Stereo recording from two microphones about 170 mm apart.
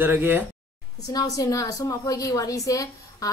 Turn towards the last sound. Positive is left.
turn(degrees=20)  # may be behind; listen again after turning